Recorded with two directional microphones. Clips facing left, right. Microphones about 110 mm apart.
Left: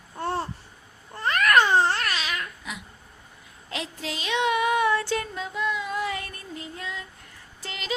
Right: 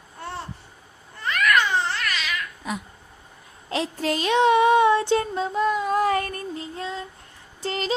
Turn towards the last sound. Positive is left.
turn(degrees=-35)  # may be behind; listen again after turning